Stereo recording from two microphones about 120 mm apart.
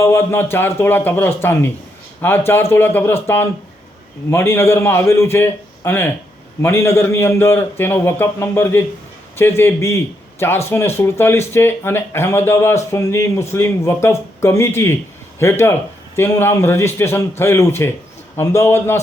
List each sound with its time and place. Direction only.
0.0 s speech: 20° left (ahead or behind)
4.3 s speech: 20° left (ahead or behind)